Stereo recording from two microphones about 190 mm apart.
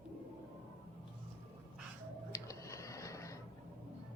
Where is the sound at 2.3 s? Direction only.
15° left (ahead or behind).